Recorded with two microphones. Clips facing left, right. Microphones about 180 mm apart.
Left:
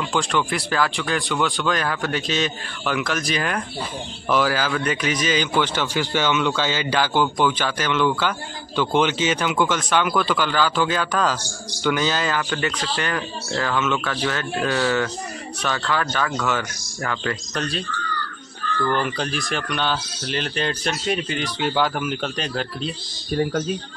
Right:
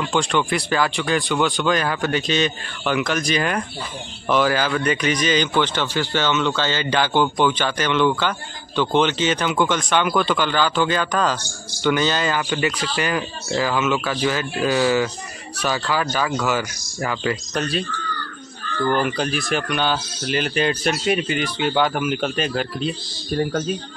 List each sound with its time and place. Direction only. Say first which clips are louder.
0.0 s speech: right 2 dB; centre (ahead or behind)
18.9 s speech: right 4 dB; 5° right (ahead or behind)